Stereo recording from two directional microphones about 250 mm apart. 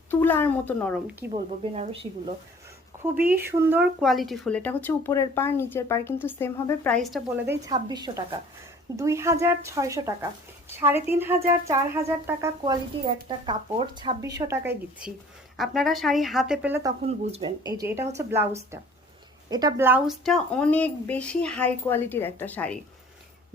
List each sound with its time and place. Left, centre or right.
0.1 s a woman's voice: centre
1.3 s speech: right
3.0 s a woman's voice: centre
7.5 s speech: centre
17.1 s speech: right
17.7 s speech: centre